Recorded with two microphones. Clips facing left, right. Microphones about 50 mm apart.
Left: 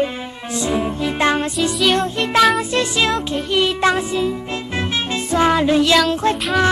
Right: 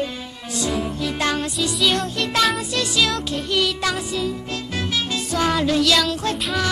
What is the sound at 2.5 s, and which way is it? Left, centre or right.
Music, left.